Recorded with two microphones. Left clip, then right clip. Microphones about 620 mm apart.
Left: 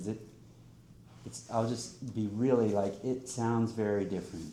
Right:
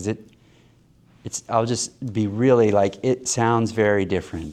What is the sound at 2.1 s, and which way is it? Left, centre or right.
Speech, right.